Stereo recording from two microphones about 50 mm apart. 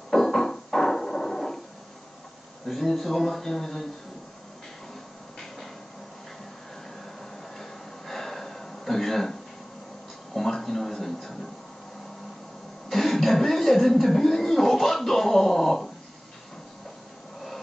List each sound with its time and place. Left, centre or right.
0.1 s music: centre
2.7 s speech: centre
8.1 s gasp: centre
10.3 s speech: centre
12.9 s chuckle: centre